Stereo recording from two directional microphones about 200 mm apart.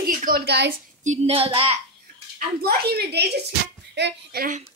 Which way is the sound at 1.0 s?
35° right (ahead or behind).